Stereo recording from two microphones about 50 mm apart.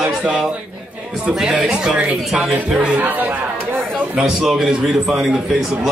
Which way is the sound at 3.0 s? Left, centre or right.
Right.